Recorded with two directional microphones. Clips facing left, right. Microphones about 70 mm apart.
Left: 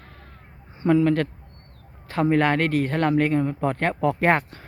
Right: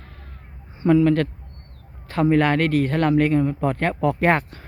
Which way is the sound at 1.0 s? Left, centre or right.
Centre.